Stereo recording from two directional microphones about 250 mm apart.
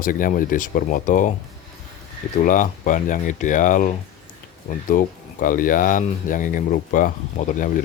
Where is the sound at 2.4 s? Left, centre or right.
Left.